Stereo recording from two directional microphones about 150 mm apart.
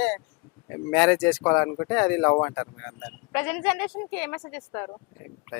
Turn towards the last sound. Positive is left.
turn(degrees=20)  # may be behind; listen again after turning